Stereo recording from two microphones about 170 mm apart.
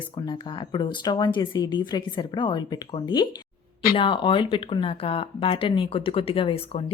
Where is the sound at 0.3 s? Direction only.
30° left (ahead or behind).